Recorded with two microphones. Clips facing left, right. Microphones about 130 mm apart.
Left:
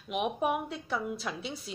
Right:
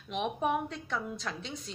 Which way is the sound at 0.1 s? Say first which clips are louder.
Left 1 dB; 5° left (ahead or behind).